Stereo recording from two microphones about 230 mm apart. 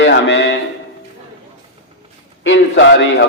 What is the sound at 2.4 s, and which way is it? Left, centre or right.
Speech, left.